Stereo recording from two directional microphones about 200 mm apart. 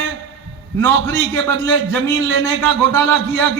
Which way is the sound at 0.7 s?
15° left (ahead or behind).